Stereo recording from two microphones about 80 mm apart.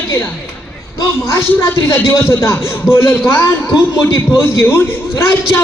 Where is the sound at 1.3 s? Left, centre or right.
Left.